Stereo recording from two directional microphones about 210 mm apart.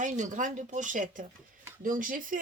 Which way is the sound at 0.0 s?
35° right (ahead or behind).